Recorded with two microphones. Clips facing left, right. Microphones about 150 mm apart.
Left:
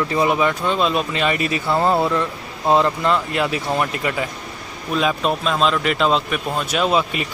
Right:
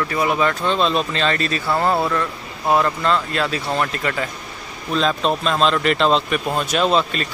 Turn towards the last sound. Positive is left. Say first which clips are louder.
# right 1 dB
turn(degrees=10)  # may be behind; listen again after turning